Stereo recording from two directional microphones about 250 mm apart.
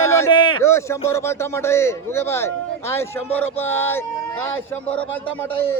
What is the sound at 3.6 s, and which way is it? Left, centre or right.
Speech, centre.